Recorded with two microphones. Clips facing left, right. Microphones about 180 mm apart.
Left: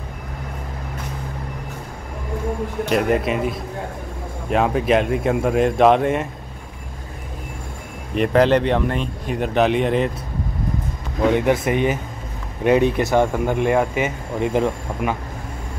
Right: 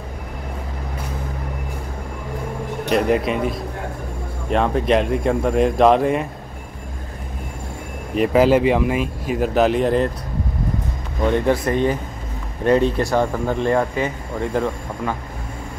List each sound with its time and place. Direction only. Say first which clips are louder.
2.9 s speech: right 1 dB; centre (ahead or behind)
8.1 s speech: right 1 dB; 5° right (ahead or behind)
11.3 s speech: even; 10° left (ahead or behind)